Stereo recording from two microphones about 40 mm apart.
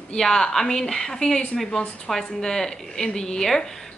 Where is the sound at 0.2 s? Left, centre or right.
Centre.